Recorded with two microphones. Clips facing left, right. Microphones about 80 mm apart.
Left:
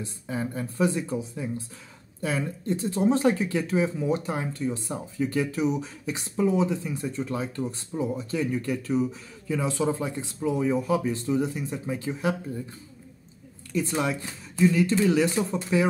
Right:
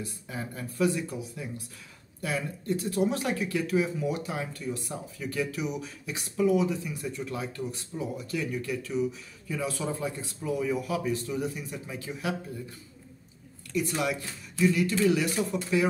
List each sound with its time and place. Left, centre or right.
0.0 s speech: left
13.7 s speech: left